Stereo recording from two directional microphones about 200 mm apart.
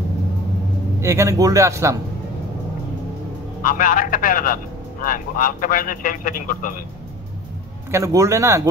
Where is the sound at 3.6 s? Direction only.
45° left (ahead or behind).